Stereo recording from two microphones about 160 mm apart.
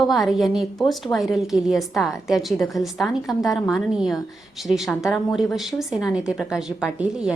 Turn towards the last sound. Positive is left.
turn(degrees=-5)  # may be behind; listen again after turning